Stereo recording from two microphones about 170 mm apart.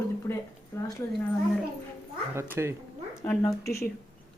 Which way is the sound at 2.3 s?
15° right (ahead or behind).